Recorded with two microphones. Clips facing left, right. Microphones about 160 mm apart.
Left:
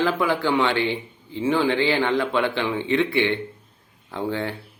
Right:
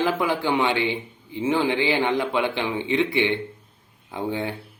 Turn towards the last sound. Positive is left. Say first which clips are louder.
# left 1 dB
turn(degrees=-15)  # may be behind; listen again after turning